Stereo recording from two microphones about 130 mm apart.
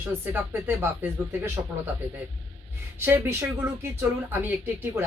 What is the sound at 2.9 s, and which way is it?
A woman's voice, 20° right (ahead or behind).